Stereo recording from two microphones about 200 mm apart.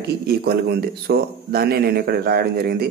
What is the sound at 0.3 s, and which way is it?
Speech, 50° right (ahead or behind).